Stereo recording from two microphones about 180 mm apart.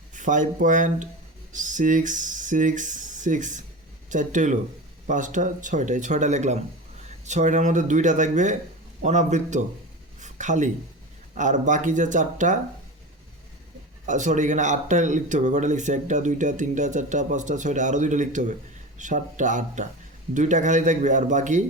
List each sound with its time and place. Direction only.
0.1 s a man's voice: 45° right (ahead or behind)
10.2 s a sound: 40° right (ahead or behind)
11.3 s speech: 45° right (ahead or behind)
14.1 s speech: 45° right (ahead or behind)